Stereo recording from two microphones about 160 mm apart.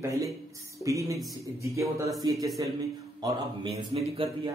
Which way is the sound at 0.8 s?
20° right (ahead or behind).